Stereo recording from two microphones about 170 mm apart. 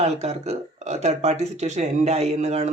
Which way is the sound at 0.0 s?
40° right (ahead or behind).